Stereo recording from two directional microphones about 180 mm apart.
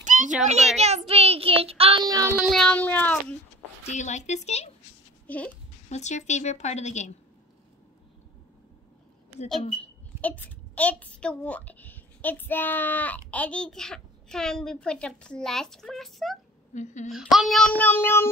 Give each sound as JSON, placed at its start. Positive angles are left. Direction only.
{"t": 0.0, "sound": "children playing", "side_deg": -45}
{"t": 0.7, "sound": "child singing", "side_deg": -35}
{"t": 2.5, "sound": "speech", "side_deg": 5}
{"t": 3.8, "sound": "a woman's voice", "side_deg": 40}
{"t": 5.2, "sound": "a child's voice", "side_deg": 10}
{"t": 5.9, "sound": "a woman's voice", "side_deg": 40}
{"t": 10.2, "sound": "a child's voice", "side_deg": 10}
{"t": 16.7, "sound": "a woman's voice", "side_deg": 40}
{"t": 17.1, "sound": "a child's voice", "side_deg": 0}